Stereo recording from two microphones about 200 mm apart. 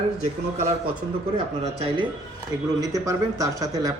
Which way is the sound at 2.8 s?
15° right (ahead or behind).